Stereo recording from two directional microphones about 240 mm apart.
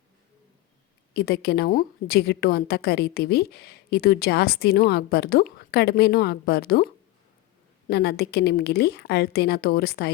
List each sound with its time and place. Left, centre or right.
1.1 s a woman's voice: left